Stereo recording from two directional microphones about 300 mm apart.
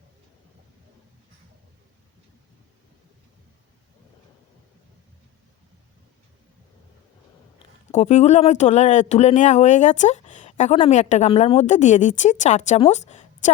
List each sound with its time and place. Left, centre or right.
7.9 s speech: left